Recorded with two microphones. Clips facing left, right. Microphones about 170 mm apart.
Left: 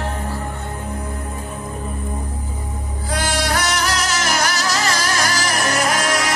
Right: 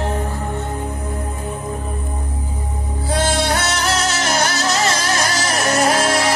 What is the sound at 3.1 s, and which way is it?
Music, 25° right (ahead or behind).